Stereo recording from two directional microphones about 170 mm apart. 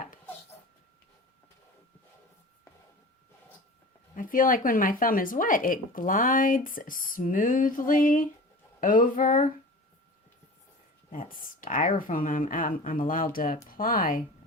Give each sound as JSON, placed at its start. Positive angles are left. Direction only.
{"t": 4.1, "sound": "speech", "side_deg": 50}
{"t": 11.1, "sound": "speech", "side_deg": 55}